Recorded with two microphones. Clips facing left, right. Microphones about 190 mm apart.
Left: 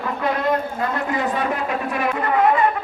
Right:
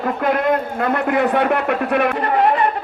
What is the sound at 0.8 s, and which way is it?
A man's voice, 60° right (ahead or behind).